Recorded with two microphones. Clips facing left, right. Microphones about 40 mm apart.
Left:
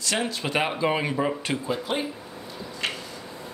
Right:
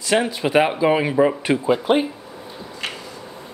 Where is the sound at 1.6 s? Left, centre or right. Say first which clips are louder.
Right 12 dB; right.